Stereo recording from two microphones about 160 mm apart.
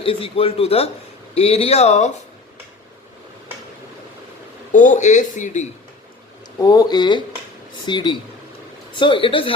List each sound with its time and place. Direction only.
0.0 s a man's voice: 35° left (ahead or behind)
4.7 s speech: 50° left (ahead or behind)
6.6 s a man's voice: 25° left (ahead or behind)